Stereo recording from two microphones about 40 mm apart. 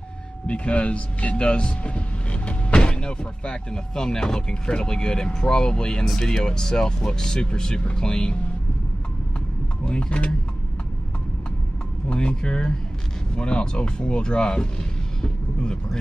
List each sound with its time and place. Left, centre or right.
0.5 s speech: left
9.8 s speech: left
12.1 s speech: left